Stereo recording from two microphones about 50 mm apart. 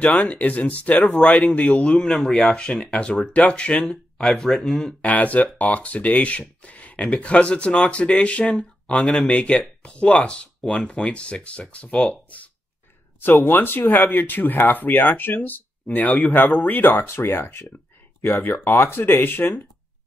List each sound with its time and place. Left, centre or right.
0.2 s speech: left; by 2.6 s centre
2.6 s speech: left
4.2 s speech: centre
5.0 s speech: left
13.2 s speech: left
17.0 s speech: left